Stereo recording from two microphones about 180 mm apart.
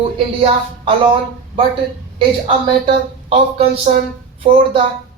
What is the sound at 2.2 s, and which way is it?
A woman's voice, 30° right (ahead or behind).